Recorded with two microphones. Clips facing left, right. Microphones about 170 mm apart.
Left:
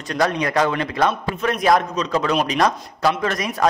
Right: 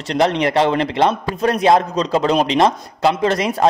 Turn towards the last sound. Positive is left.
turn(degrees=-30)  # may be behind; listen again after turning